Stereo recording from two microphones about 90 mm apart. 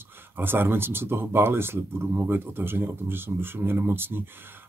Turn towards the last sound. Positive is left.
turn(degrees=-25)  # may be behind; listen again after turning